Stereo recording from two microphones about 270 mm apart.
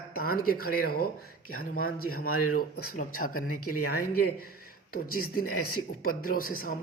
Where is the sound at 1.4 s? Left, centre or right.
Left.